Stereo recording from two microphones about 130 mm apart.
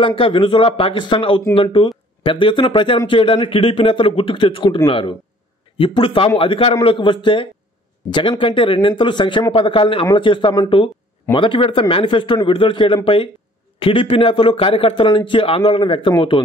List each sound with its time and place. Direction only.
0.0 s a man's voice: 45° left (ahead or behind)